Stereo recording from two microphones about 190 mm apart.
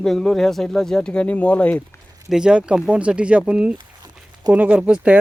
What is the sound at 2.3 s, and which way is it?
Speech, 5° right (ahead or behind).